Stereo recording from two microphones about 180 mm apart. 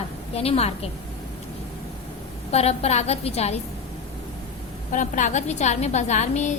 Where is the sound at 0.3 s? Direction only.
35° left (ahead or behind).